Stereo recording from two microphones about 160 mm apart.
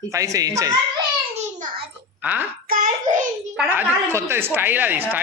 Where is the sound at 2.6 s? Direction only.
60° right (ahead or behind).